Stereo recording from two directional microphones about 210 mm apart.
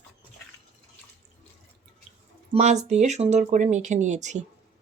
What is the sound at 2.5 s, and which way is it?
Speech, 30° right (ahead or behind).